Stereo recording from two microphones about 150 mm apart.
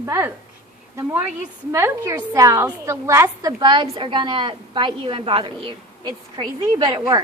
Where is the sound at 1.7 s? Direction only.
20° right (ahead or behind).